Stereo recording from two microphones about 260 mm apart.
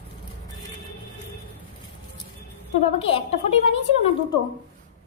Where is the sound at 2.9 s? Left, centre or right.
Left.